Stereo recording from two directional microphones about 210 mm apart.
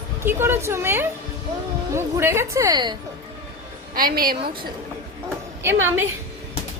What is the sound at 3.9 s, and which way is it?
Speech, 45° right (ahead or behind).